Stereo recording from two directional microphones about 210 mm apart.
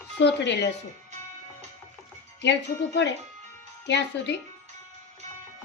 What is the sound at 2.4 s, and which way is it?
Wind chime, 55° left (ahead or behind).